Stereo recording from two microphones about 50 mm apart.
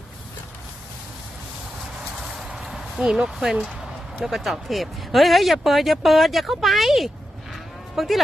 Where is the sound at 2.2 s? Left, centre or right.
Centre.